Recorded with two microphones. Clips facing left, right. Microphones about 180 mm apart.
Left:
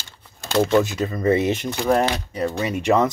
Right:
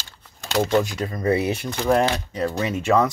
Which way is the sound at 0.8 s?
25° left (ahead or behind).